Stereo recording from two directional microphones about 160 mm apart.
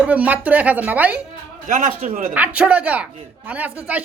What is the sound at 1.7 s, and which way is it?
Speech, 55° right (ahead or behind).